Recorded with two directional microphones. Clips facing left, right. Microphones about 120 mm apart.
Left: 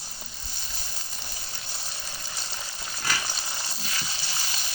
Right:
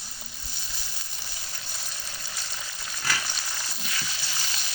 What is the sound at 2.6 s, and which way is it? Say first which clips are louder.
Frying: left 1 dB; 30° left (ahead or behind).